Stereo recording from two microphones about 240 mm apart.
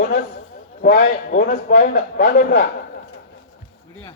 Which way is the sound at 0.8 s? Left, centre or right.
Left.